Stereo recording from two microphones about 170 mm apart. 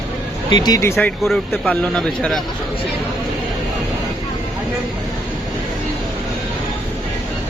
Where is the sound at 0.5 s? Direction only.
25° left (ahead or behind).